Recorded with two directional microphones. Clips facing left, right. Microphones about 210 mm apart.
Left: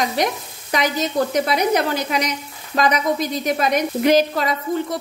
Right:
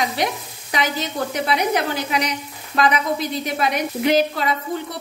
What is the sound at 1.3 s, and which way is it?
A woman's voice, 45° left (ahead or behind).